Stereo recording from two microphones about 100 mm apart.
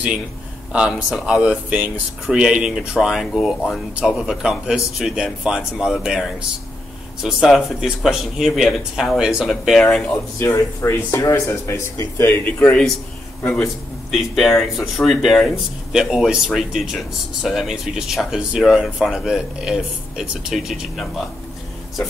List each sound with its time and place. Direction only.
0.7 s speech: 10° right (ahead or behind)
9.8 s speech: 15° left (ahead or behind)
10.4 s speech: 25° left (ahead or behind)
14.1 s speech: centre (ahead or behind)